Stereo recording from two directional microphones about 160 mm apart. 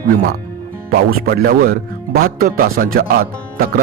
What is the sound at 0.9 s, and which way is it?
A man's voice, 70° right (ahead or behind).